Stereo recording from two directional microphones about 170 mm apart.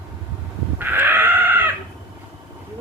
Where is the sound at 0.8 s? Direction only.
10° right (ahead or behind).